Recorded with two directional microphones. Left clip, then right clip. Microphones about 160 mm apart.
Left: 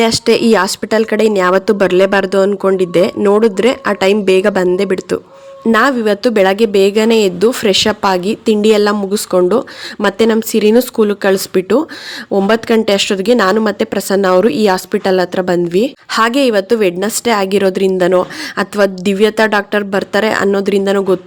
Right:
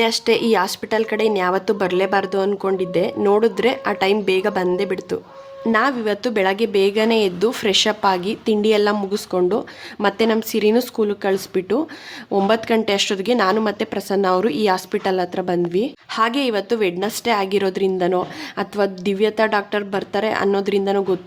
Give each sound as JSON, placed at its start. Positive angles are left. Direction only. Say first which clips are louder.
{"t": 0.0, "sound": "speech", "louder": "left 6 dB", "side_deg": 35}